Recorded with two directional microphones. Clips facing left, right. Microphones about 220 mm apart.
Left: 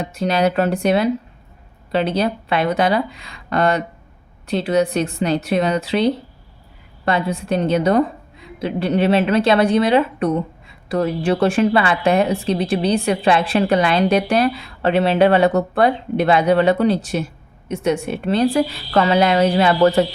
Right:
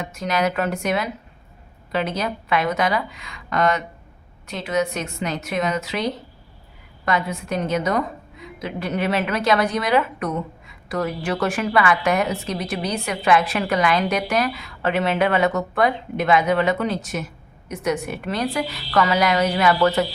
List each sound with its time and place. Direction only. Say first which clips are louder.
0.0 s a woman's voice: left 5 dB; 30° left (ahead or behind)